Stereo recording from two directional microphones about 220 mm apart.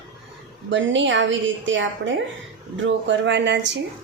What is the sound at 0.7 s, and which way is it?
A woman's voice, 55° right (ahead or behind).